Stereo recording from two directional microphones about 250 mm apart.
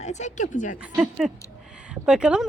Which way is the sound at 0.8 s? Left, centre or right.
Centre.